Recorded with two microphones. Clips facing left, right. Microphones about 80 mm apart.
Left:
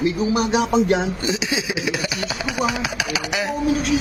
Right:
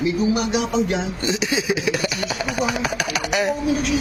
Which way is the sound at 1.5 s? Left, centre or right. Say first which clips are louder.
Right 2 dB; centre.